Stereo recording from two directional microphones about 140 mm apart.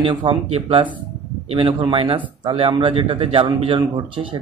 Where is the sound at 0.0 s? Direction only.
35° right (ahead or behind).